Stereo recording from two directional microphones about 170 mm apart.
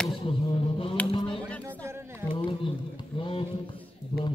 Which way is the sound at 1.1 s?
30° left (ahead or behind).